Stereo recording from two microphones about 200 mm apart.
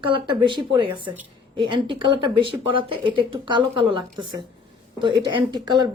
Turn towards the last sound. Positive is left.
turn(degrees=-20)  # may be behind; listen again after turning